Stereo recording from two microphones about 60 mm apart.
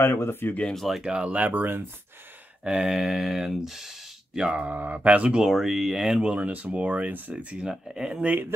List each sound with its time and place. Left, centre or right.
0.0 s speech: left
0.7 s speech: centre
1.0 s speech: centre
2.6 s speech: centre
4.4 s speech: centre
4.7 s speech: right
5.3 s speech: centre; by 7.3 s right
7.5 s speech: centre